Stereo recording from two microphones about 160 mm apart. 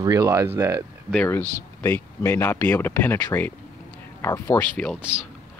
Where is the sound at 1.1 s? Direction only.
10° left (ahead or behind).